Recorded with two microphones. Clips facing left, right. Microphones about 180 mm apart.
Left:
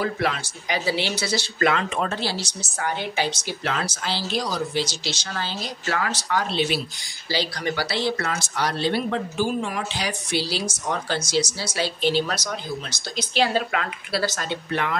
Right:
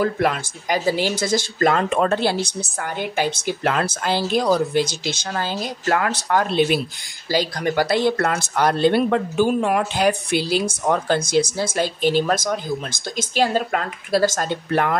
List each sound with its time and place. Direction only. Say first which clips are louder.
0.0 s speech: right 5 dB; 50° right (ahead or behind)